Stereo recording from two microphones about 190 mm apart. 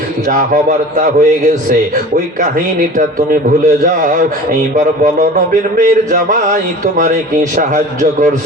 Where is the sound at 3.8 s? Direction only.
45° right (ahead or behind).